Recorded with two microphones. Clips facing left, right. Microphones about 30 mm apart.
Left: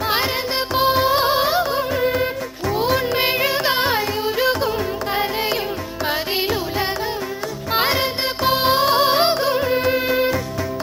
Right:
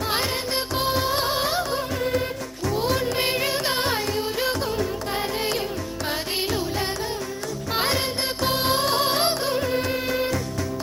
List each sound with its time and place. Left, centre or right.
0.7 s music: left
2.6 s carnatic music: left
6.1 s music: left